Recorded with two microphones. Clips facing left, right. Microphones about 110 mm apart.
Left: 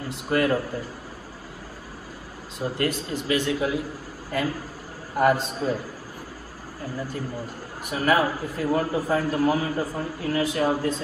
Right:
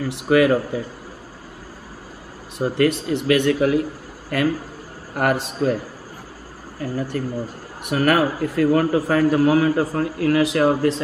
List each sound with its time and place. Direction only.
0.0 s a man's voice: 80° right
2.6 s speech: 65° right (ahead or behind)
6.8 s a man's voice: 65° right (ahead or behind); by 11.0 s 90° right